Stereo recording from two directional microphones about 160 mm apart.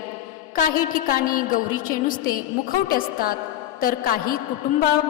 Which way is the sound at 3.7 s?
60° left (ahead or behind).